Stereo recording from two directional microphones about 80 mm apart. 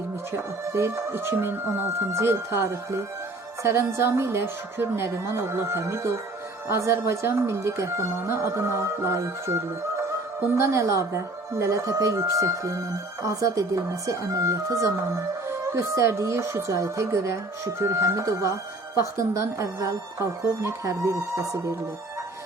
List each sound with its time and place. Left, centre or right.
0.3 s a woman's voice: right